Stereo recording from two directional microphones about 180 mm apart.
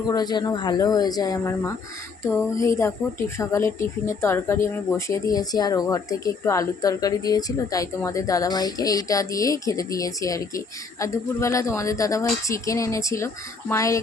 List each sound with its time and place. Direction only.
0.1 s a woman's voice: 20° left (ahead or behind)